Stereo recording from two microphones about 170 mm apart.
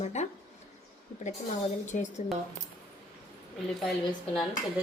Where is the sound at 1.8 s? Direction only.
45° left (ahead or behind).